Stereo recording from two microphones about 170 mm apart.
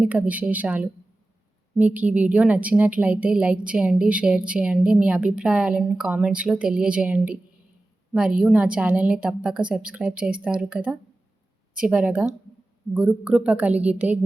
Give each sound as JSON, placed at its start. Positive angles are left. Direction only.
{"t": 0.0, "sound": "a woman's voice", "side_deg": -10}